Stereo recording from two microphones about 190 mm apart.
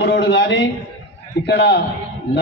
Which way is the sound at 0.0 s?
65° left (ahead or behind).